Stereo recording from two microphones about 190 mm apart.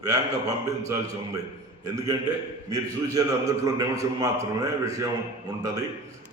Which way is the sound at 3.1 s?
20° right (ahead or behind).